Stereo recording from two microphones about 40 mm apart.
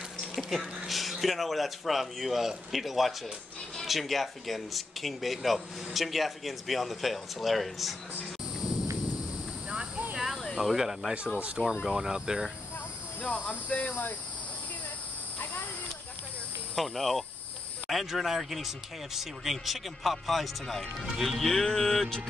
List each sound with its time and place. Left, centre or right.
0.4 s a sound: centre
0.8 s speech: centre
10.6 s speech: centre
11.3 s speech: right
11.6 s speech: centre
13.2 s speech: left
16.7 s speech: centre
21.2 s music: centre